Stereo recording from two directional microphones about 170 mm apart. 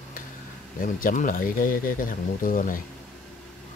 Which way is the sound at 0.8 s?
55° left (ahead or behind).